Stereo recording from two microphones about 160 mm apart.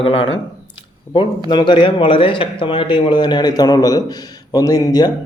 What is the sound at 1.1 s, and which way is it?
A man's voice, 30° left (ahead or behind).